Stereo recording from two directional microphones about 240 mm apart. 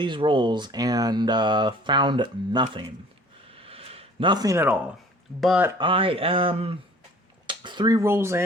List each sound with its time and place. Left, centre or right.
0.0 s speech: right
3.5 s a sound: right
5.4 s speech: centre
5.7 s speech: right